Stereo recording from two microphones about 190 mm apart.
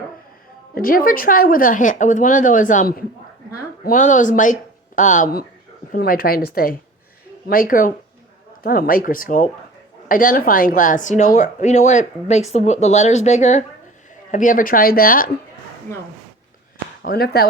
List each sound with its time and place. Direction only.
0.8 s a woman's voice: 50° left (ahead or behind)
17.0 s a woman's voice: 55° left (ahead or behind)